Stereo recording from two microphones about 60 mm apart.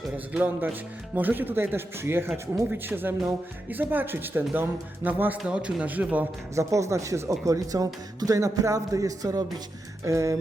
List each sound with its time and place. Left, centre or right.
0.4 s speech: right
6.6 s speech: right
10.0 s speech: right